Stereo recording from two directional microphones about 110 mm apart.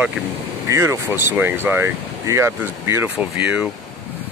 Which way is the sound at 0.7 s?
25° right (ahead or behind).